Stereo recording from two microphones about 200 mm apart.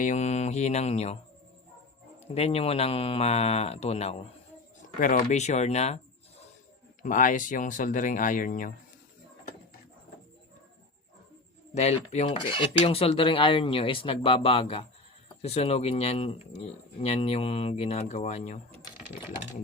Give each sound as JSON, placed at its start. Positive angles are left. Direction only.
{"t": 0.0, "sound": "speech", "side_deg": 35}
{"t": 2.2, "sound": "speech", "side_deg": 30}
{"t": 7.0, "sound": "speech", "side_deg": 40}
{"t": 11.7, "sound": "speech", "side_deg": 35}